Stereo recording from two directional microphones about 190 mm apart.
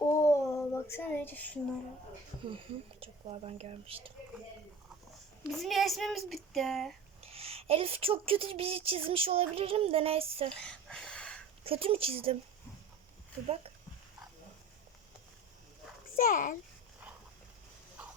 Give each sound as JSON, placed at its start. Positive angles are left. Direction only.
{"t": 0.0, "sound": "child singing", "side_deg": 15}
{"t": 3.0, "sound": "speech", "side_deg": -30}
{"t": 5.4, "sound": "speech", "side_deg": 0}
{"t": 7.2, "sound": "a woman's voice", "side_deg": -30}
{"t": 10.5, "sound": "a sound", "side_deg": 5}
{"t": 11.6, "sound": "a woman's voice", "side_deg": -30}
{"t": 16.1, "sound": "a child's voice", "side_deg": 45}